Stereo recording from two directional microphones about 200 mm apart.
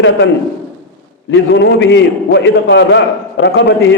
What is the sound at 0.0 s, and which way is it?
Speech, 70° left (ahead or behind).